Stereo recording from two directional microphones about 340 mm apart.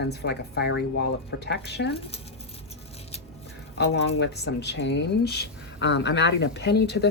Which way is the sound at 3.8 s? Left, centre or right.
Left.